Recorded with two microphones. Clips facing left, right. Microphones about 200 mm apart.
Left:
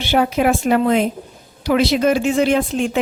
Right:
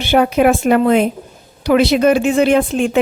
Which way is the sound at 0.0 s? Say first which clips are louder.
Right 4 dB; 55° right (ahead or behind).